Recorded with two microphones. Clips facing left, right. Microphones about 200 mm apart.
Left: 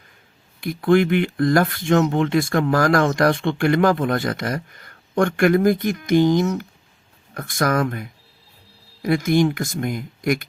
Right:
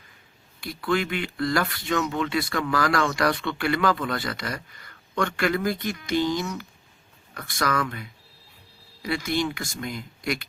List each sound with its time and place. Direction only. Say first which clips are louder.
0.6 s a man's voice: left 9 dB; 50° left (ahead or behind)